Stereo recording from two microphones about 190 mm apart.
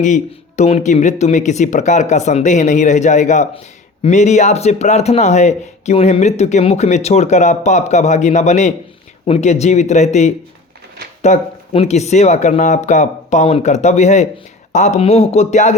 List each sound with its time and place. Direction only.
0.0 s speech: 40° left (ahead or behind)